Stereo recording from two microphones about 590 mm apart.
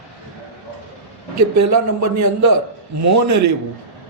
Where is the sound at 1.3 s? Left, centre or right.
Right.